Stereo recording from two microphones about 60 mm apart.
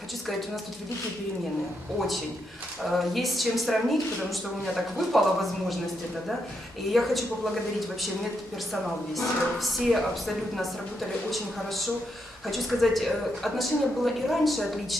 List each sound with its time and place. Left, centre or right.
2.8 s speech: centre
6.9 s speech: centre
8.7 s speech: centre